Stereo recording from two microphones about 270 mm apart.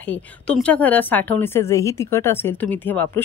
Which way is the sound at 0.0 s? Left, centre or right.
Centre.